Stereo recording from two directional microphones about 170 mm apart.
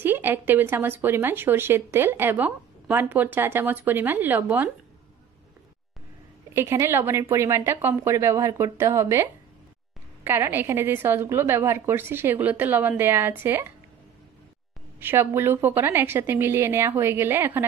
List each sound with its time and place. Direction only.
0.0 s speech: 10° right (ahead or behind)
6.5 s speech: 15° right (ahead or behind)
15.0 s speech: 15° right (ahead or behind)